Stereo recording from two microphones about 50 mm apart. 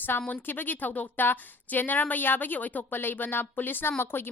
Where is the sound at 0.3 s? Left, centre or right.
Left.